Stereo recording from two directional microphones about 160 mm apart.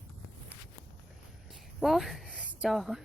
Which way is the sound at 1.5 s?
Centre (ahead or behind).